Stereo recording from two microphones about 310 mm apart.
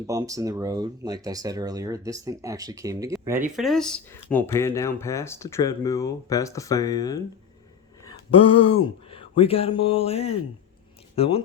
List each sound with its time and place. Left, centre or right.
0.1 s speech: centre
8.0 s a sound: centre
9.0 s speech: centre